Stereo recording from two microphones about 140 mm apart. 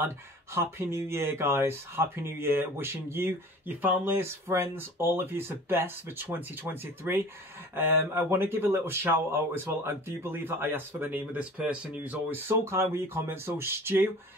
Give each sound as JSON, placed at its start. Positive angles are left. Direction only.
{"t": 0.6, "sound": "speech", "side_deg": -20}